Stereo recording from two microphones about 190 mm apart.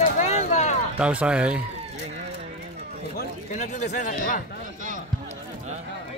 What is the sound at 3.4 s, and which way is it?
Speech, 40° left (ahead or behind).